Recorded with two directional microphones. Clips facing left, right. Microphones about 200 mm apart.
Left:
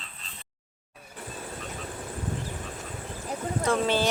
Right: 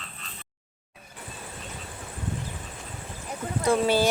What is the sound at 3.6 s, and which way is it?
Speech, 10° right (ahead or behind).